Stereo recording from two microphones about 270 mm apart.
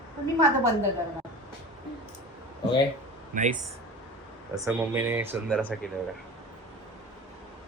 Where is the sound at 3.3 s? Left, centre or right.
Right.